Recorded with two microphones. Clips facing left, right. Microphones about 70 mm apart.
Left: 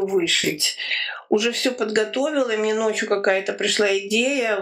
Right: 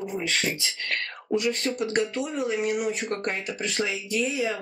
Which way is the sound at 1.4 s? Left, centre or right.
Left.